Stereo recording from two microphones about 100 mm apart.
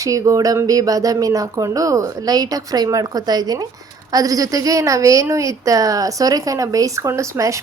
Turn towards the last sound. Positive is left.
turn(degrees=-30)  # may be behind; listen again after turning